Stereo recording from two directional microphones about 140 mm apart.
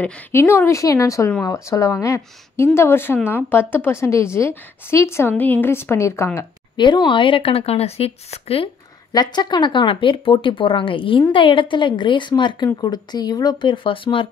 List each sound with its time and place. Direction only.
0.0 s a woman's voice: 20° left (ahead or behind)
6.8 s speech: 35° left (ahead or behind)
9.1 s speech: 30° left (ahead or behind)